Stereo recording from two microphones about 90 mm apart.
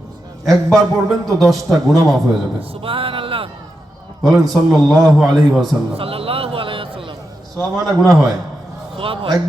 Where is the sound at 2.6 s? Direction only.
90° right.